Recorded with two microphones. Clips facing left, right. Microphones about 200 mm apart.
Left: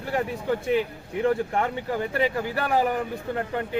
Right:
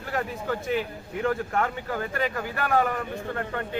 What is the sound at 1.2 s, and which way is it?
A man's voice, 25° left (ahead or behind).